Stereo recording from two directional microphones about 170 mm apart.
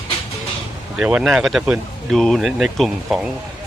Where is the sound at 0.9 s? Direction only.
5° right (ahead or behind).